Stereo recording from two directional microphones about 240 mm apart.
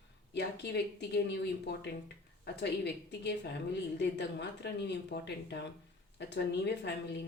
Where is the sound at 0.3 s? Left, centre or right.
Left.